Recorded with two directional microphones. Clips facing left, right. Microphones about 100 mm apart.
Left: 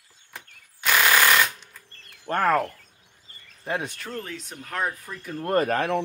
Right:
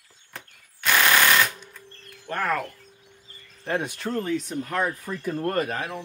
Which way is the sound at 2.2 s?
40° left (ahead or behind).